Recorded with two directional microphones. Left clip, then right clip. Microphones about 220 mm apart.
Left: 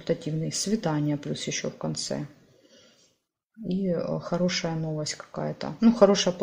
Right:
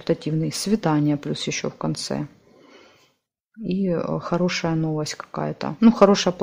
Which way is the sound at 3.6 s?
35° right (ahead or behind).